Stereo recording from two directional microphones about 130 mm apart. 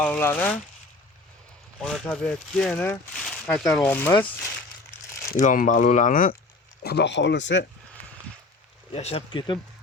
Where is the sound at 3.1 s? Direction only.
5° left (ahead or behind).